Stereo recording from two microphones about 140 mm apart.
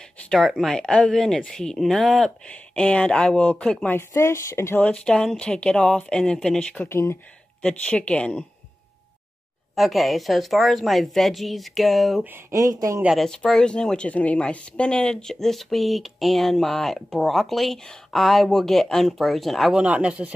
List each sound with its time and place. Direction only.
0.3 s speech: centre (ahead or behind)
4.1 s speech: 20° left (ahead or behind)
9.8 s speech: centre (ahead or behind)
12.3 s speech: 20° right (ahead or behind)
13.0 s speech: centre (ahead or behind)